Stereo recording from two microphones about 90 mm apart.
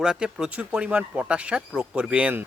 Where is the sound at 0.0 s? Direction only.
5° right (ahead or behind).